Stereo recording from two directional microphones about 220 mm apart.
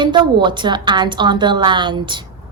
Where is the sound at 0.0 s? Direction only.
20° right (ahead or behind).